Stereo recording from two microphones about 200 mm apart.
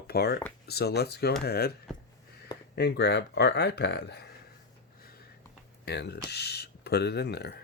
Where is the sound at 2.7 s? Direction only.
55° left (ahead or behind).